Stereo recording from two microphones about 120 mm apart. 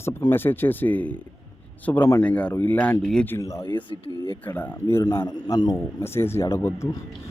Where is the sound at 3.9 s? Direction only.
35° right (ahead or behind).